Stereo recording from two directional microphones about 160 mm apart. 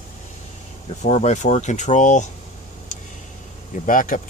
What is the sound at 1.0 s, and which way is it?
Speech, 45° left (ahead or behind).